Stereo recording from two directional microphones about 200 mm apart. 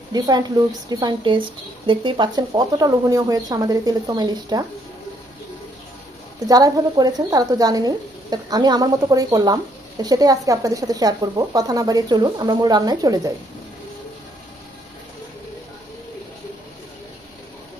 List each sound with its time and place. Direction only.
0.1 s speech: 20° right (ahead or behind)
6.4 s speech: 20° right (ahead or behind)